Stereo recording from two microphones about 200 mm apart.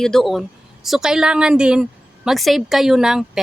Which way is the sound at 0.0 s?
Centre (ahead or behind).